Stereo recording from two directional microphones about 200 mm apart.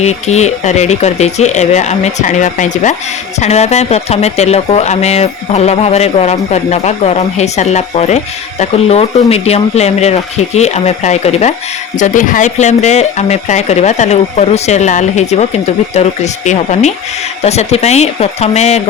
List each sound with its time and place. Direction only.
0.0 s speech: 35° left (ahead or behind)